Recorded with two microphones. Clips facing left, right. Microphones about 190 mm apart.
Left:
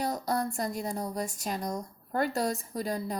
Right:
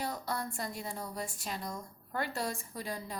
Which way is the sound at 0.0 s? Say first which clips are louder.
Left 7 dB; 40° left (ahead or behind).